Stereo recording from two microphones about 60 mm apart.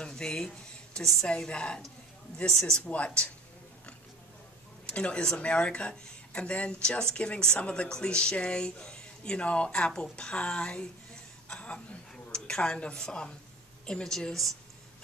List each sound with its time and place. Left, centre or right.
0.0 s a sound: centre
1.3 s speech: centre
2.8 s a woman's voice: left
4.8 s a woman's voice: centre
11.4 s a sound: centre
12.4 s speech: centre